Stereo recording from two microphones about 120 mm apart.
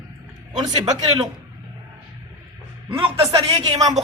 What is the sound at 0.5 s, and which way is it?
Speech, 35° right (ahead or behind).